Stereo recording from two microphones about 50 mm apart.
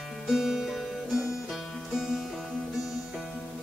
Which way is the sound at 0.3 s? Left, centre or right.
Centre.